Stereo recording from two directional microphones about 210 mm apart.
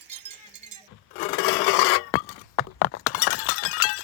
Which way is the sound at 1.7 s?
80° left.